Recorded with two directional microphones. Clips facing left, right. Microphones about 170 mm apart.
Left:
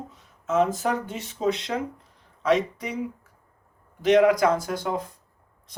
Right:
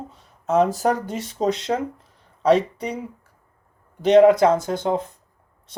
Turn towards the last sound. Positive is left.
turn(degrees=-25)  # may be behind; listen again after turning